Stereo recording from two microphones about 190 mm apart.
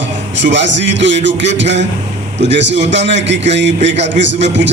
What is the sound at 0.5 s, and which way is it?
A man's voice, 70° right (ahead or behind).